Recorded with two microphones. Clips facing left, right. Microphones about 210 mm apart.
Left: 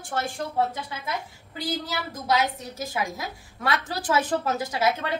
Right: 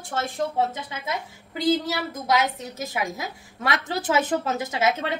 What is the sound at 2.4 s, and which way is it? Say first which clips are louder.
A woman's voice: right 1 dB; 20° right (ahead or behind).